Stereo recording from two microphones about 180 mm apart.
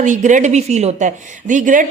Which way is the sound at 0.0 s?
45° right (ahead or behind).